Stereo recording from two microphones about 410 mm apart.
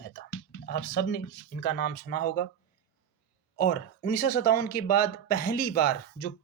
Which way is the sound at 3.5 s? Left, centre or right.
Left.